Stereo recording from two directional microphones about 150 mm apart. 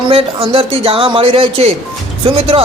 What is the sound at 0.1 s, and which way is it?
Speech, 40° right (ahead or behind).